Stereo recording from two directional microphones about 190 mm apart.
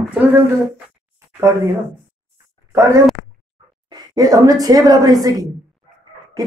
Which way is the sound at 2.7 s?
15° right (ahead or behind).